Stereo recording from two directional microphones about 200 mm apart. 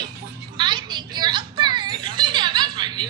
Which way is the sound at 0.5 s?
20° right (ahead or behind).